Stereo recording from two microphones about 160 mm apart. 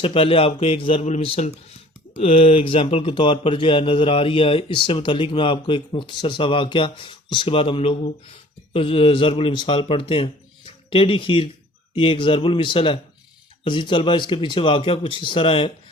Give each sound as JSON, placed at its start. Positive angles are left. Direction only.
{"t": 0.0, "sound": "speech", "side_deg": 35}